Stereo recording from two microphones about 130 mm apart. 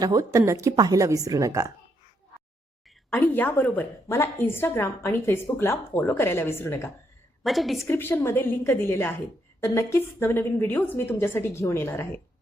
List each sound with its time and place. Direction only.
0.0 s a woman's voice: 25° right (ahead or behind)
3.1 s a woman's voice: 15° left (ahead or behind)
7.4 s a woman's voice: centre (ahead or behind)
7.9 s a woman's voice: 15° left (ahead or behind)